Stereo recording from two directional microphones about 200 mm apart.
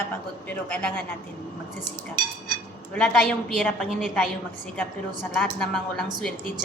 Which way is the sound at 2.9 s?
5° left (ahead or behind).